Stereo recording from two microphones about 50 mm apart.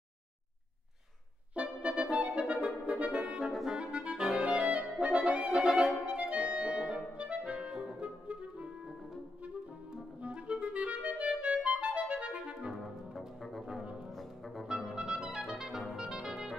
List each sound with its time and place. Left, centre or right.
1.5 s music: right
3.7 s clarinet: right
5.0 s music: right
6.0 s clarinet: right
7.7 s music: centre
8.0 s clarinet: right
10.2 s clarinet: right
12.8 s music: centre
14.9 s clarinet: centre
16.0 s music: centre